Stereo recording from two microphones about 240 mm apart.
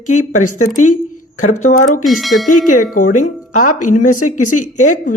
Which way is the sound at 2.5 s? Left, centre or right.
Left.